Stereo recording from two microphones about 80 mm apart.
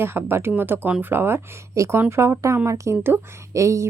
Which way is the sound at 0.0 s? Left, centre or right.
Right.